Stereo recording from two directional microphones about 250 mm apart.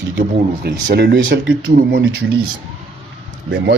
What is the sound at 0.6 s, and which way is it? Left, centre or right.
Speech, right.